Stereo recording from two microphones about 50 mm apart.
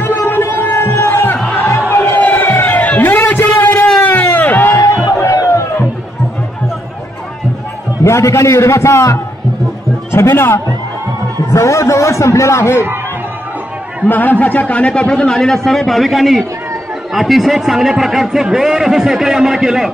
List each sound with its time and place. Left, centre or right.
0.0 s a sound: left
0.8 s a sound: left
1.1 s music: left
2.6 s a sound: left
4.7 s music: left
8.0 s a man's voice: left
10.1 s a man's voice: left
11.5 s a man's voice: left
14.0 s a man's voice: left; by 19.9 s centre